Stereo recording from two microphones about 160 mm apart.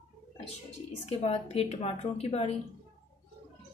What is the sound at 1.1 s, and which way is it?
A woman's voice, 40° left (ahead or behind).